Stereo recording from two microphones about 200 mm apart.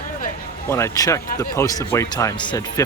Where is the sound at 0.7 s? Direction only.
15° left (ahead or behind).